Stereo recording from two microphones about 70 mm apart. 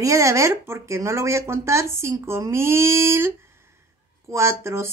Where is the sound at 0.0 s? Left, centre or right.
Right.